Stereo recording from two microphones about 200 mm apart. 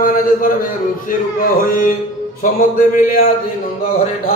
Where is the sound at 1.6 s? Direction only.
45° left (ahead or behind).